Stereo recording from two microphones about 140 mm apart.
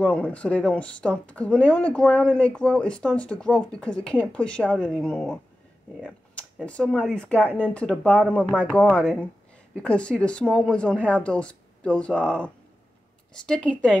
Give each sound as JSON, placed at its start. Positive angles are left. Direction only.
{"t": 0.0, "sound": "speech", "side_deg": 10}